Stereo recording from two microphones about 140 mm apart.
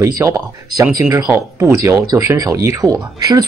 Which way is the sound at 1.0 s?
10° right (ahead or behind).